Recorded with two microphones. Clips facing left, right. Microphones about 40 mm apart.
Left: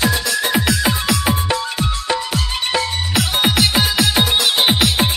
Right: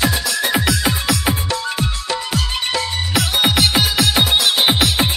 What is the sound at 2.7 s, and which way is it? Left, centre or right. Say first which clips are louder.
Music: left 2 dB; centre.